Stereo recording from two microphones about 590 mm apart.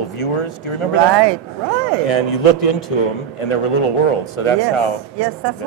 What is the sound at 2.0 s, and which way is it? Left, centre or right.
Speech, left.